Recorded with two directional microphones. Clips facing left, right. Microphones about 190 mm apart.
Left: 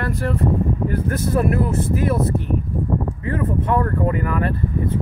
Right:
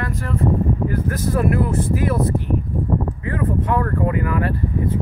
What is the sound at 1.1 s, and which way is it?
Speech, 25° left (ahead or behind).